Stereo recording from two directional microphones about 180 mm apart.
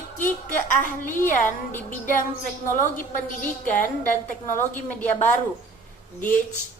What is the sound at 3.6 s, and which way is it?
Speech, 50° left (ahead or behind).